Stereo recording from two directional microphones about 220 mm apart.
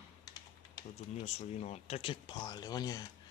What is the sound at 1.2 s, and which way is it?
Speech, 30° left (ahead or behind).